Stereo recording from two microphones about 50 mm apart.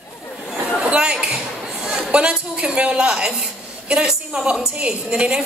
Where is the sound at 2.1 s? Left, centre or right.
Right.